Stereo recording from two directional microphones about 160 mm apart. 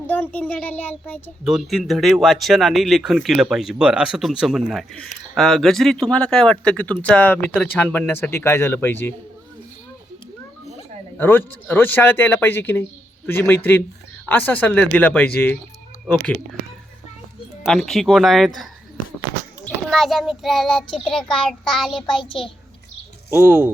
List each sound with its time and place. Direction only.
0.1 s speech: 10° left (ahead or behind)
1.5 s speech: centre (ahead or behind)
11.2 s speech: 10° left (ahead or behind)
17.6 s a child's voice: centre (ahead or behind)
22.1 s a child's voice: 30° left (ahead or behind)
23.3 s speech: 10° right (ahead or behind)